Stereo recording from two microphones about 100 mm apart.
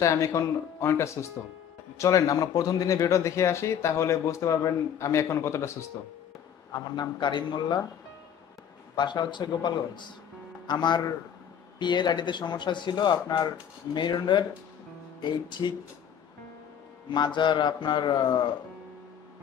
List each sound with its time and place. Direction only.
0.0 s speech: 30° left (ahead or behind)
6.7 s speech: 45° left (ahead or behind)
8.9 s speech: 45° left (ahead or behind)
17.1 s speech: 50° left (ahead or behind)